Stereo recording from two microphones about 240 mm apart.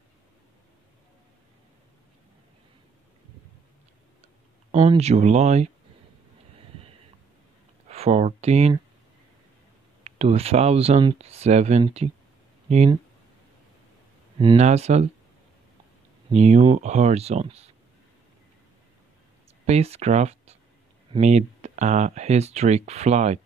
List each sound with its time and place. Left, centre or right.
4.6 s speech: right
7.9 s speech: right
10.0 s speech: right
14.4 s speech: right
16.3 s speech: right
19.6 s speech: right